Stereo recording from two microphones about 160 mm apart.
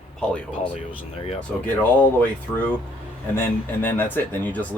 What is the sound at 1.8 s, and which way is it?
Speech, 10° left (ahead or behind).